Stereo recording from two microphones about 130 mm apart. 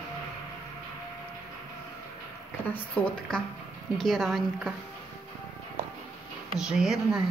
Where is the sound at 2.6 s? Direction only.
10° left (ahead or behind).